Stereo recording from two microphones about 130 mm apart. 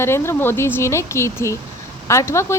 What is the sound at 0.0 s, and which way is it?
A woman's voice, 20° left (ahead or behind).